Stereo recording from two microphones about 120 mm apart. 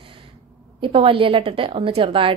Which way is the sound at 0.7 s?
45° right (ahead or behind).